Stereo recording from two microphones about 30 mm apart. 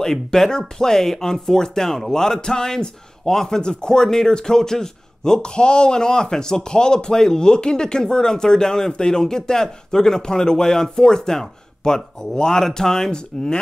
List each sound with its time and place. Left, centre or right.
0.0 s a man's voice: centre